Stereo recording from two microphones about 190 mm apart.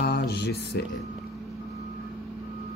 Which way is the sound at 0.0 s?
60° left (ahead or behind).